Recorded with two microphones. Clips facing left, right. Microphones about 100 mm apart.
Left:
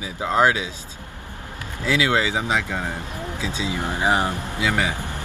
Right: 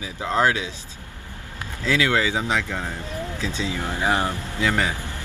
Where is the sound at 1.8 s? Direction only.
20° left (ahead or behind).